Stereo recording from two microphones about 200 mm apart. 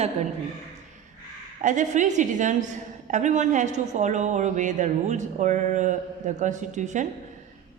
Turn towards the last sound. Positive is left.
turn(degrees=-35)  # may be behind; listen again after turning